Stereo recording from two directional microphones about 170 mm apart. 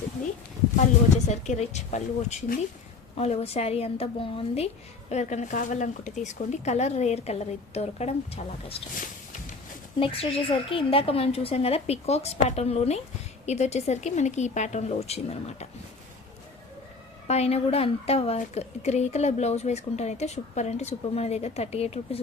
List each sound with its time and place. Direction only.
1.3 s a woman's voice: 40° left (ahead or behind)
10.0 s a woman's voice: 35° left (ahead or behind)
17.2 s a woman's voice: 40° left (ahead or behind)